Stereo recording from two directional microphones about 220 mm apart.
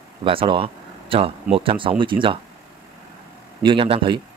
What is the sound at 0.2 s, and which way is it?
Speech, 25° right (ahead or behind).